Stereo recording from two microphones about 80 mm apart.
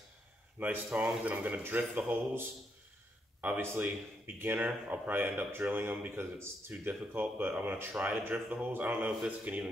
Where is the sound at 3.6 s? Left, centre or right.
Right.